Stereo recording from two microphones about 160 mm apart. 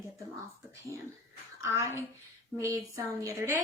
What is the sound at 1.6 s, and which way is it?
A woman's voice, 15° right (ahead or behind).